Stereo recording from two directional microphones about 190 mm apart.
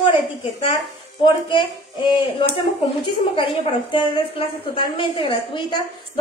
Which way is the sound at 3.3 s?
25° left (ahead or behind).